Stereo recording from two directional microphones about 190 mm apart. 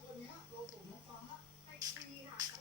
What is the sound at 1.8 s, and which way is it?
Music, 20° right (ahead or behind).